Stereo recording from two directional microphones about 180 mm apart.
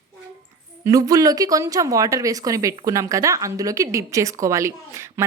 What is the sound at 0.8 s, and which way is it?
A woman's voice, 20° right (ahead or behind).